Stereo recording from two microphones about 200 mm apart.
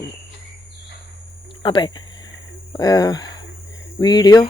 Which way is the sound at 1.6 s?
25° left (ahead or behind).